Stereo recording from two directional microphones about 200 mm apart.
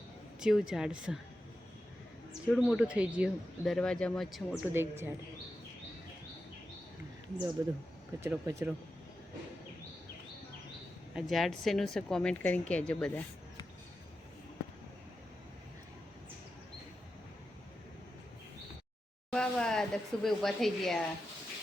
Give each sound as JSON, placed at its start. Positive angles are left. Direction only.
{"t": 0.3, "sound": "speech", "side_deg": -5}
{"t": 2.5, "sound": "speech", "side_deg": 0}
{"t": 4.7, "sound": "speech", "side_deg": -10}
{"t": 7.6, "sound": "speech", "side_deg": -20}
{"t": 11.1, "sound": "speech", "side_deg": 0}
{"t": 19.3, "sound": "speech", "side_deg": 5}